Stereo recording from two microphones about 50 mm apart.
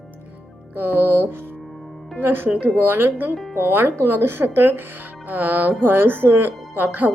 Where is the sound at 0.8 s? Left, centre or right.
Right.